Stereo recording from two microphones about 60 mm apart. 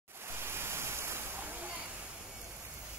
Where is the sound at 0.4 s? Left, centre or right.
Right.